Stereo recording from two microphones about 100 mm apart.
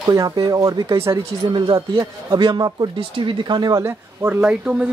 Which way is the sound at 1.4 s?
45° right (ahead or behind).